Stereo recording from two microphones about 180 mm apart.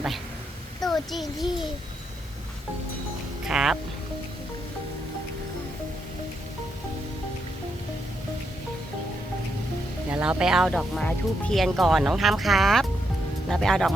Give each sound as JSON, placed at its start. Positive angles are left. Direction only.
{"t": 0.9, "sound": "speech", "side_deg": 0}
{"t": 3.4, "sound": "speech", "side_deg": -5}
{"t": 10.1, "sound": "speech", "side_deg": -5}